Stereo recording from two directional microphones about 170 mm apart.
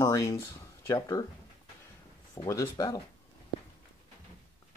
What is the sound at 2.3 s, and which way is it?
Speech, 20° left (ahead or behind).